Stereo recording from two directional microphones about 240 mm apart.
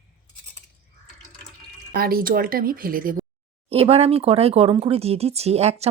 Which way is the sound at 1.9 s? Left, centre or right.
Right.